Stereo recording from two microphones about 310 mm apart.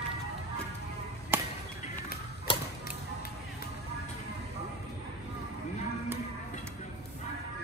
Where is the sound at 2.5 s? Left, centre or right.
Centre.